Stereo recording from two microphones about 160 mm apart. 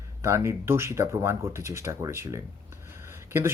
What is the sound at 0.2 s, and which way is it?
Speech, 15° right (ahead or behind).